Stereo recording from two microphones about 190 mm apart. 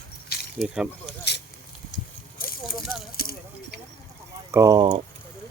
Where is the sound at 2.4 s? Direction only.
50° left (ahead or behind).